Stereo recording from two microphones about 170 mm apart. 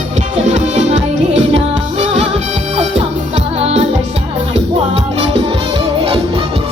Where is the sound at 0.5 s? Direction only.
40° right (ahead or behind).